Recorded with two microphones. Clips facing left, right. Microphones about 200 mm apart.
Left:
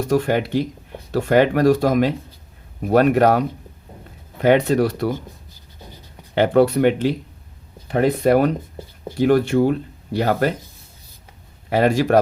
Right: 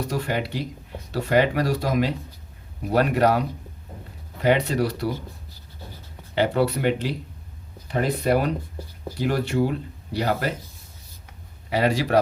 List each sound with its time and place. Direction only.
0.1 s speech: 50° left (ahead or behind)
4.4 s speech: 55° left (ahead or behind)
6.3 s speech: 55° left (ahead or behind)
11.7 s speech: 50° left (ahead or behind)